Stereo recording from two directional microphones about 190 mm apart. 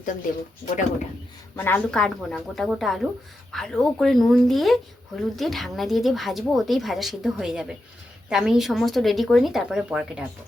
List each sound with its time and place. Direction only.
1.5 s speech: 10° left (ahead or behind); by 10.2 s 5° right (ahead or behind)